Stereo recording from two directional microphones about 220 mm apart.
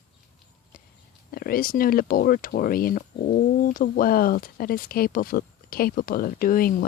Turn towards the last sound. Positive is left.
turn(degrees=40)  # may be behind; listen again after turning